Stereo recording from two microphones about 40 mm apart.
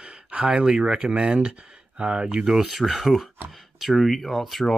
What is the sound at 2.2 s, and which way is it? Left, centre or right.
Speech, centre.